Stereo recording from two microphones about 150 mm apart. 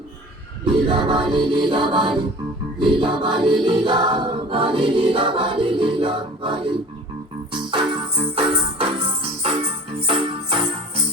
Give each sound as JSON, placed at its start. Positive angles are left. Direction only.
{"t": 0.6, "sound": "choir", "side_deg": -30}
{"t": 7.5, "sound": "music", "side_deg": -35}